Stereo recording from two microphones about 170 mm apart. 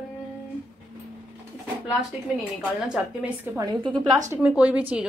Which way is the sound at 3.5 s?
25° right (ahead or behind).